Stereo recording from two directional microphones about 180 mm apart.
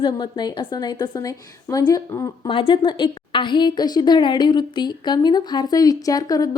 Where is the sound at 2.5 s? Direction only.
30° left (ahead or behind).